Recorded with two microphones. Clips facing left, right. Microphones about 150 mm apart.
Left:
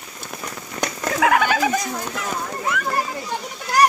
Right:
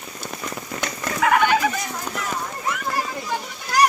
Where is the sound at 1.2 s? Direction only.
90° left.